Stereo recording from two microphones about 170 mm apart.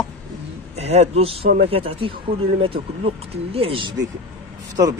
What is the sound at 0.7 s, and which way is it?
Speech, 40° right (ahead or behind).